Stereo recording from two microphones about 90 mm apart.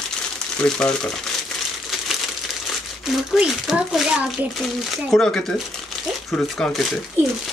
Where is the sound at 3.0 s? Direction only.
5° right (ahead or behind).